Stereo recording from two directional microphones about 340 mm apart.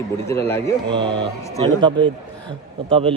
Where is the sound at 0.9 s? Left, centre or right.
Centre.